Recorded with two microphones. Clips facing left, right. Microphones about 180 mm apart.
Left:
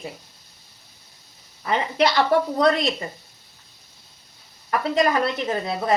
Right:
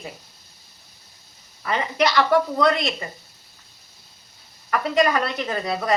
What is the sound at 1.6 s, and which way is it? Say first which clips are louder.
A woman's voice: left 1 dB; 25° left (ahead or behind).